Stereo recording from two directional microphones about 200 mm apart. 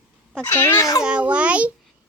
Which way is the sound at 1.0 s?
5° right (ahead or behind).